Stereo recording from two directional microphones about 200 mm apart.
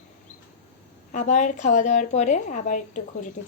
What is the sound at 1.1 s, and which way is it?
A woman's voice, 35° left (ahead or behind).